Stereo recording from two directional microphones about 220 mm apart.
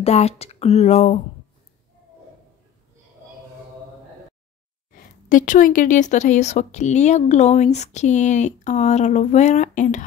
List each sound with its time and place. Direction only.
0.0 s speech: 30° left (ahead or behind)
5.3 s speech: 35° left (ahead or behind)